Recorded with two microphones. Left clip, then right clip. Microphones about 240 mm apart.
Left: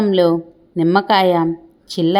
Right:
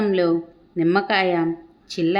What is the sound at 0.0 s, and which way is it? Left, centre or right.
A woman's voice, left.